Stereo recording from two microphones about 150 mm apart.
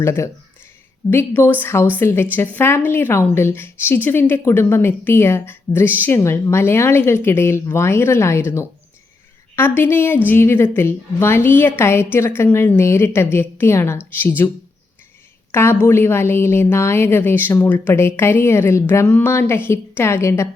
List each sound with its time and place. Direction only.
0.0 s a woman's voice: 20° left (ahead or behind)
15.5 s a woman's voice: 15° left (ahead or behind)